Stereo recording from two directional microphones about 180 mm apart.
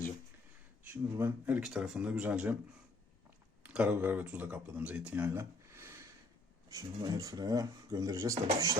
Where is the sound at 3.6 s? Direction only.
10° right (ahead or behind).